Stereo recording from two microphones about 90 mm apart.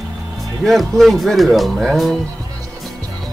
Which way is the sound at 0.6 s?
Centre (ahead or behind).